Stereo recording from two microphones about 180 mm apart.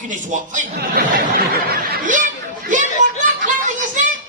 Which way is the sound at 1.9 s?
45° right (ahead or behind).